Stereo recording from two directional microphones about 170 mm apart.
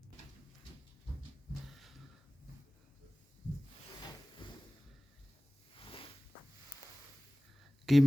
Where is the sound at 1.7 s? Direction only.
Centre (ahead or behind).